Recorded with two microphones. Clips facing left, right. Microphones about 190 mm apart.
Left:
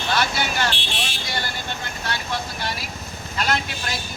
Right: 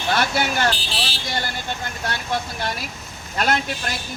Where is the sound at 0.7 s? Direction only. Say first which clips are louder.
Right 2 dB; 35° right (ahead or behind).